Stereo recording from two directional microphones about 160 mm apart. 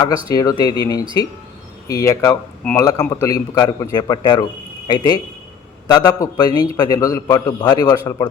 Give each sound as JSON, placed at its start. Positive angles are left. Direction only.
{"t": 0.3, "sound": "a man's voice", "side_deg": 25}